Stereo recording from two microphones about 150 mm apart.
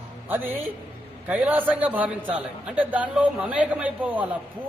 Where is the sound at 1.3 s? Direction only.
10° right (ahead or behind).